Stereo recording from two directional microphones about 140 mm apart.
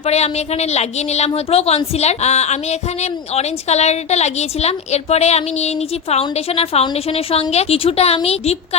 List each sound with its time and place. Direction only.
0.0 s a woman's voice: 50° left (ahead or behind)